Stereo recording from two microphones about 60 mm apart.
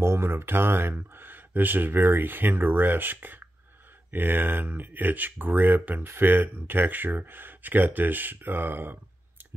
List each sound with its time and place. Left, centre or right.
0.0 s speech: right